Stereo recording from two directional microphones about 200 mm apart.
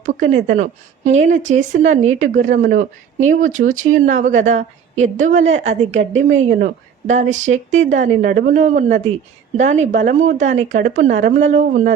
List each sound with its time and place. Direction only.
0.0 s a woman's voice: 40° right (ahead or behind)